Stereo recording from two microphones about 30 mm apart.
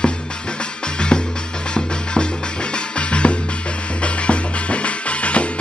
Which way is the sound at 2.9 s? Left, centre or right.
Left.